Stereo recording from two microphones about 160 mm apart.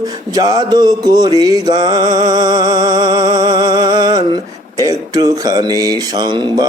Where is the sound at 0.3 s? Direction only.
25° right (ahead or behind).